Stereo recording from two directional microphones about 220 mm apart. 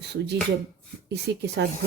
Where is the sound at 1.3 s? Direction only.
50° right (ahead or behind).